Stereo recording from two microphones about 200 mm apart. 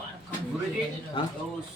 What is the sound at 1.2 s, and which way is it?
Speech, 25° left (ahead or behind).